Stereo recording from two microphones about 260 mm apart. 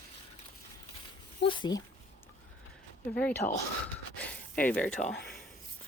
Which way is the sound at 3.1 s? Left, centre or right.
Centre.